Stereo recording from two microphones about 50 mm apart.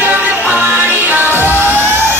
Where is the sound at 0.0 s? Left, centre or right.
Right.